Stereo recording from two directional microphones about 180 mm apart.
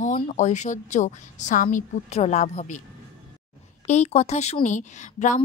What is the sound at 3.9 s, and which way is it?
A woman's voice, 40° left (ahead or behind).